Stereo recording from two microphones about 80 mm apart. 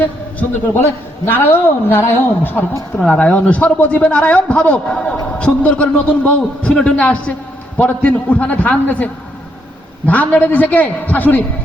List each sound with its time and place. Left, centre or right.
0.0 s a man's voice: left
10.1 s a man's voice: centre